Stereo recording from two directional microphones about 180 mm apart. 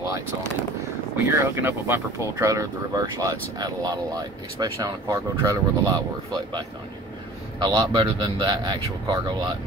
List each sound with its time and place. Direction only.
1.1 s speech: 10° right (ahead or behind)
7.6 s speech: 25° right (ahead or behind)